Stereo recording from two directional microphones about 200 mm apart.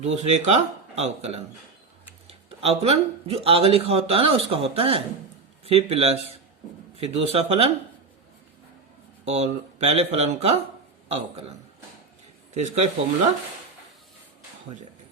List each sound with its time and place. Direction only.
0.0 s speech: 35° right (ahead or behind)
9.2 s speech: 30° right (ahead or behind)
12.5 s speech: 35° right (ahead or behind)